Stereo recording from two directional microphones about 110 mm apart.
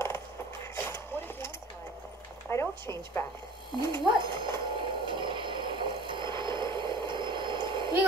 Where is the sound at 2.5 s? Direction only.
25° left (ahead or behind).